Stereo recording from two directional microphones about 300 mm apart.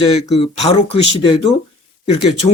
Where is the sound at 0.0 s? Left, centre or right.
Centre.